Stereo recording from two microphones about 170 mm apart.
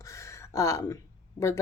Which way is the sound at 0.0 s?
15° left (ahead or behind).